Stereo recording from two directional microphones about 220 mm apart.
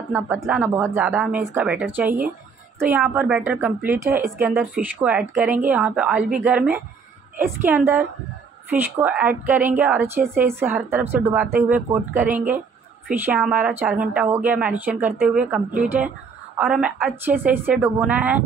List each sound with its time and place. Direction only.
0.1 s a woman's voice: 5° right (ahead or behind)
2.0 s speech: 40° right (ahead or behind)
2.8 s a woman's voice: 10° right (ahead or behind)